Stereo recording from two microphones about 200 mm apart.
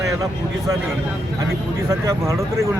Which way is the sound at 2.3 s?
15° right (ahead or behind).